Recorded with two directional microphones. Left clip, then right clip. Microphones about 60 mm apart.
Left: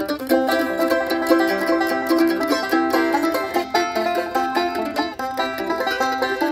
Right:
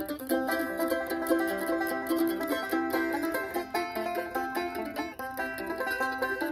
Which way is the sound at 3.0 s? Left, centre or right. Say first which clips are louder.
Left 11 dB; right.